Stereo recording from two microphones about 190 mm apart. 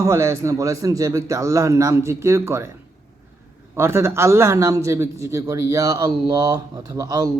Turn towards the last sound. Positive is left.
turn(degrees=-20)  # may be behind; listen again after turning